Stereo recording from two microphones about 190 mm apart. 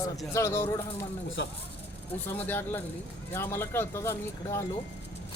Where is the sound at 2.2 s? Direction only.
10° left (ahead or behind).